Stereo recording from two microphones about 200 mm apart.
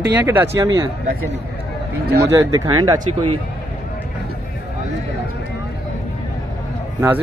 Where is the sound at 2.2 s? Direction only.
15° right (ahead or behind).